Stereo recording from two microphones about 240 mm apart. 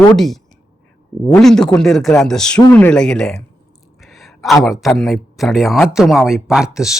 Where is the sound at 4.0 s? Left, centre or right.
Centre.